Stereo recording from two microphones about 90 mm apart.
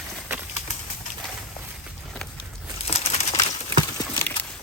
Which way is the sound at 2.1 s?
10° left (ahead or behind).